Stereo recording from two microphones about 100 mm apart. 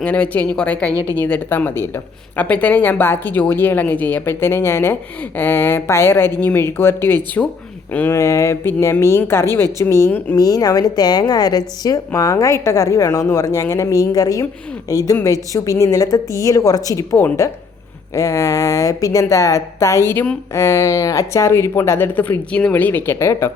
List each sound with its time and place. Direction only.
0.0 s a woman's voice: 15° left (ahead or behind)